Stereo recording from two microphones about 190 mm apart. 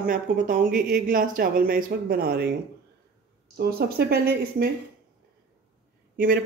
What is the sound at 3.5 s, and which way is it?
Speech, 55° right (ahead or behind).